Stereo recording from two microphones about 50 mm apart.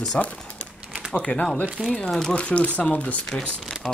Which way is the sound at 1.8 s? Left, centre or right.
Right.